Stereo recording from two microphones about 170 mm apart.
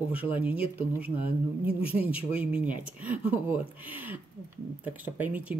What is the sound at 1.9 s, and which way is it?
Speech, 10° right (ahead or behind).